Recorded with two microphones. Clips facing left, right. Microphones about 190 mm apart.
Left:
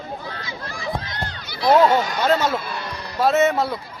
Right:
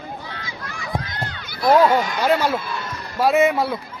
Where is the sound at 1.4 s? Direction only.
50° right (ahead or behind).